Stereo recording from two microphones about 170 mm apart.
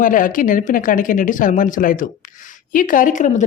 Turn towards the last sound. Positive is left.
turn(degrees=45)  # may be behind; listen again after turning